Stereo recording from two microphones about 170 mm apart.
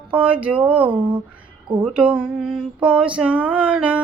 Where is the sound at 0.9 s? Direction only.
30° right (ahead or behind).